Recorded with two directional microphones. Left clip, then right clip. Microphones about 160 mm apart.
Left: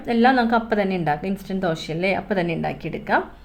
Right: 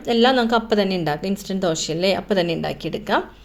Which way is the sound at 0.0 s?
30° right (ahead or behind).